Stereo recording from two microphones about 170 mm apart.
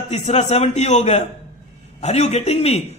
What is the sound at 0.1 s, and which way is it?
A man's voice, 40° left (ahead or behind).